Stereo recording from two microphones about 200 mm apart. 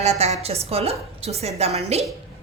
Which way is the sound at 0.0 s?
30° right (ahead or behind).